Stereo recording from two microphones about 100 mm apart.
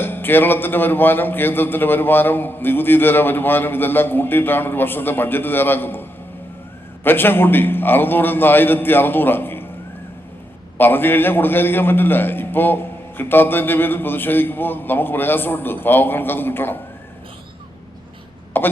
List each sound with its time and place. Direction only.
0.0 s a man's voice: 20° left (ahead or behind)
10.8 s a man's voice: 20° left (ahead or behind)
18.5 s a man's voice: 20° left (ahead or behind)